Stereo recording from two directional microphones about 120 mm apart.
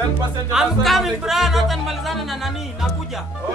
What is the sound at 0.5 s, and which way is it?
A man's voice, centre (ahead or behind).